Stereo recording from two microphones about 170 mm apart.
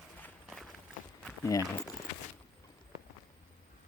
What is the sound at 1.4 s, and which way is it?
Speech, 15° left (ahead or behind).